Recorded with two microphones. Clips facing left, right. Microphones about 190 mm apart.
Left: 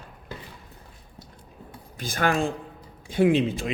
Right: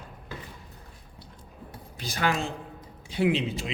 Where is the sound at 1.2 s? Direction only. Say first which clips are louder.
Left 3 dB; 45° left (ahead or behind).